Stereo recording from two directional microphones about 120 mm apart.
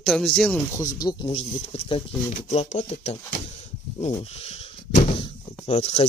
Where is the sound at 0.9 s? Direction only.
35° left (ahead or behind).